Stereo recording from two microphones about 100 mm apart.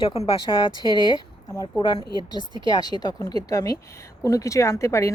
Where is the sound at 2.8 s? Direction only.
45° left (ahead or behind).